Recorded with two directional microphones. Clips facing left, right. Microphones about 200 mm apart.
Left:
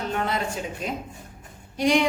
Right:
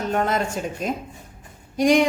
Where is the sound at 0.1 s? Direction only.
45° right (ahead or behind).